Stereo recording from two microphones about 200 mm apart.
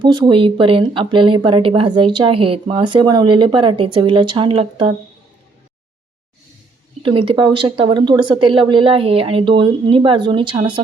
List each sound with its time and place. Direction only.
0.0 s speech: 25° right (ahead or behind)
7.0 s speech: 25° right (ahead or behind)